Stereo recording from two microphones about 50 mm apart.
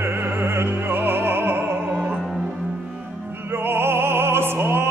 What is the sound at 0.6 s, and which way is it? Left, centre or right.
Music, right.